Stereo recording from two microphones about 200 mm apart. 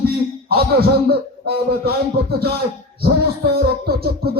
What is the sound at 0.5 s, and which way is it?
Speech, 50° right (ahead or behind).